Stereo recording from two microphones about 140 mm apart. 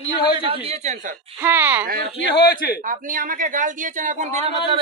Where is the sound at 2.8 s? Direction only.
70° right (ahead or behind); by 4.5 s 55° right (ahead or behind).